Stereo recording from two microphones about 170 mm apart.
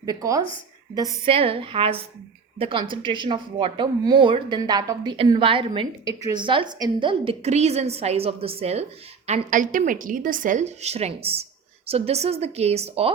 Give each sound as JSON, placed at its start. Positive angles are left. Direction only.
{"t": 0.0, "sound": "speech", "side_deg": -20}
{"t": 1.2, "sound": "a woman's voice", "side_deg": -35}